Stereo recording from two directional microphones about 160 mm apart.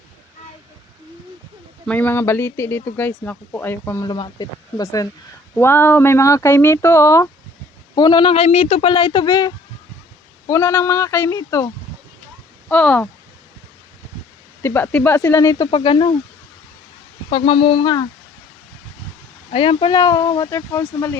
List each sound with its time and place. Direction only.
1.9 s speech: 10° left (ahead or behind)
4.0 s speech: 25° left (ahead or behind)
12.6 s speech: 10° left (ahead or behind)
14.6 s speech: 15° left (ahead or behind); by 16.1 s 30° left (ahead or behind)
17.3 s speech: 35° left (ahead or behind)
19.5 s speech: 35° left (ahead or behind); by 21.2 s 20° left (ahead or behind)